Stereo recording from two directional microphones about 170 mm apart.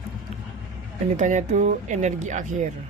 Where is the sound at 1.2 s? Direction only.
45° right (ahead or behind).